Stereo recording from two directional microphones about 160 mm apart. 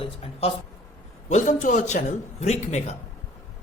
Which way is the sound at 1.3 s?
50° left (ahead or behind).